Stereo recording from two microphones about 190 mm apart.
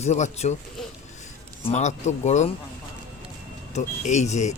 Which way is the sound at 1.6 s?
35° left (ahead or behind).